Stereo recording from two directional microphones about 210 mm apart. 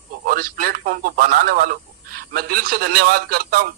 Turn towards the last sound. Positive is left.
turn(degrees=-45)  # may be behind; listen again after turning